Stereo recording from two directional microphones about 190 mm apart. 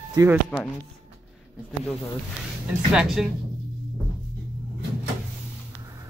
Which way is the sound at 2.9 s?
5° right (ahead or behind).